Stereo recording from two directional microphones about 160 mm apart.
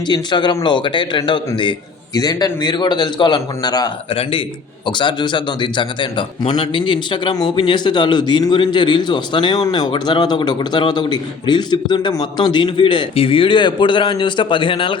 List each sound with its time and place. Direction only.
0.1 s a man's voice: 30° left (ahead or behind)